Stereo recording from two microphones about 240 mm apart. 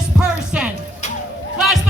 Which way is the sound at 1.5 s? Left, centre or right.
Centre.